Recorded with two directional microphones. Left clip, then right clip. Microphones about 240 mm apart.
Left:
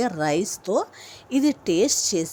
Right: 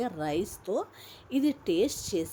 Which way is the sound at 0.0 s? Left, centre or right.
Centre.